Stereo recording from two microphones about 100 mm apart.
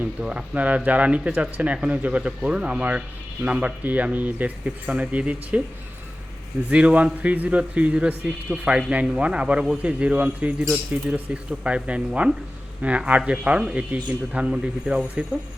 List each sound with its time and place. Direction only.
0.0 s speech: 10° right (ahead or behind)
6.7 s speech: 15° right (ahead or behind)